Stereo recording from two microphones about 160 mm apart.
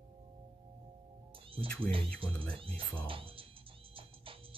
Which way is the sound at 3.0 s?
35° right (ahead or behind).